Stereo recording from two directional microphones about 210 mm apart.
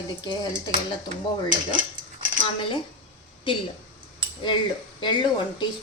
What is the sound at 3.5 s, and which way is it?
Speech, 25° left (ahead or behind).